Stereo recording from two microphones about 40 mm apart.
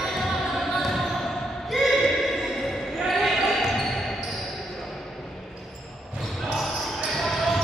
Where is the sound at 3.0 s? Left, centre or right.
Centre.